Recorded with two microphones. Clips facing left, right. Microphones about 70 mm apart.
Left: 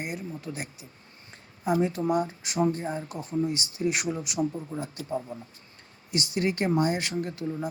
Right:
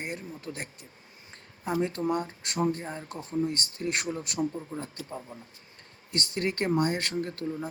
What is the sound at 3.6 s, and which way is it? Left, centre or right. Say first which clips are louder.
Speech: left 4 dB; centre.